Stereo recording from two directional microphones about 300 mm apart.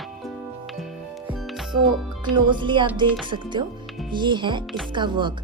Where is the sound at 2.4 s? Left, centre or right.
Centre.